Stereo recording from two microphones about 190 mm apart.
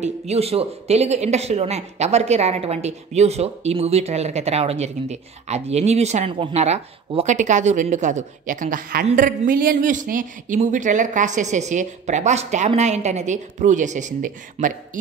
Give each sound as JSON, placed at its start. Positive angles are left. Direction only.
{"t": 0.0, "sound": "speech", "side_deg": -35}